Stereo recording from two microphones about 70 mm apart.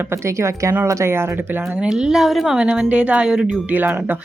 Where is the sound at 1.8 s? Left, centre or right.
Centre.